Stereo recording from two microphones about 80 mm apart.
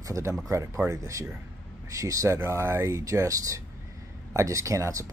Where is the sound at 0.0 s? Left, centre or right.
Right.